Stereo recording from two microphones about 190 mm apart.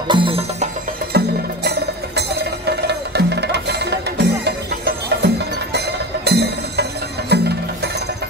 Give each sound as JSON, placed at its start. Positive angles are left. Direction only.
{"t": 0.1, "sound": "music", "side_deg": -30}
{"t": 1.1, "sound": "music", "side_deg": -60}